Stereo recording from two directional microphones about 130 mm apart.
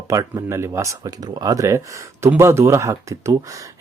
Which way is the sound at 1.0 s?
30° right (ahead or behind).